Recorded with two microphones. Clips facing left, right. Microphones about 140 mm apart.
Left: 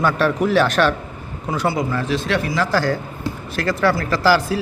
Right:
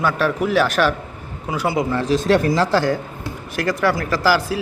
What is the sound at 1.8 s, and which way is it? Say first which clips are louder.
Speech: right 2 dB; 25° right (ahead or behind).